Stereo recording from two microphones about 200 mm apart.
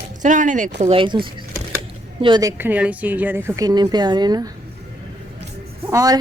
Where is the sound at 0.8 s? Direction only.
25° right (ahead or behind).